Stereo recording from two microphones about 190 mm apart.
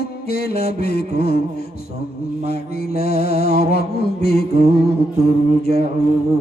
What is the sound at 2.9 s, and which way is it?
Mantra, 55° left (ahead or behind).